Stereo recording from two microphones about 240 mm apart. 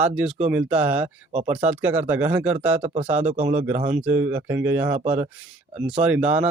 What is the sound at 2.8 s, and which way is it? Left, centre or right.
Speech, right.